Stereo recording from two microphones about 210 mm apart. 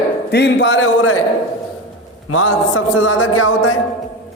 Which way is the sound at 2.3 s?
80° left.